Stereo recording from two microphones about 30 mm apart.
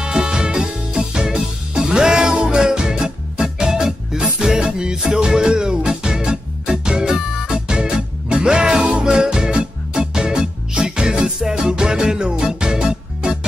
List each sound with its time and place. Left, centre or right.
0.0 s music: right